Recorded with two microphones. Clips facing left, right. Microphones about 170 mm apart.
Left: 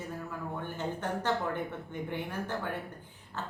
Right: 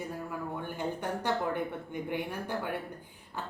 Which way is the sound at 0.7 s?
10° right (ahead or behind).